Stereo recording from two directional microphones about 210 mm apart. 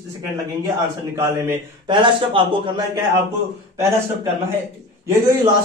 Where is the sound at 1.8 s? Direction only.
25° right (ahead or behind).